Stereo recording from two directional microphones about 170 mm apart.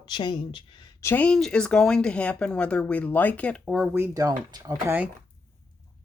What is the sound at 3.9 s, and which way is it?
Speech, 15° right (ahead or behind).